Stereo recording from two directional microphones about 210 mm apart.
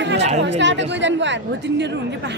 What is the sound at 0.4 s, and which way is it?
Speech, 55° right (ahead or behind).